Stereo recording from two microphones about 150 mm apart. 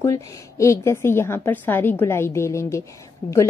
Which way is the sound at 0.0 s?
20° left (ahead or behind).